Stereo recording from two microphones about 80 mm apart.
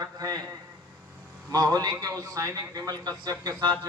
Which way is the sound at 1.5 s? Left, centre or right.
Right.